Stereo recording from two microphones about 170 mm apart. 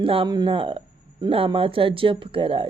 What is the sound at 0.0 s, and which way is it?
Speech, 30° right (ahead or behind).